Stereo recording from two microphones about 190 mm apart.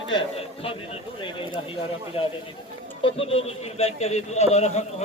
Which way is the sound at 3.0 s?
30° left (ahead or behind).